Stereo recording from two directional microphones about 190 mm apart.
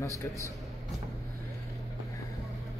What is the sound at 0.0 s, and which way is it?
Speech, 15° left (ahead or behind).